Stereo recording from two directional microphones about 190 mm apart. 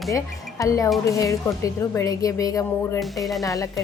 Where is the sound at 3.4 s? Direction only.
15° left (ahead or behind).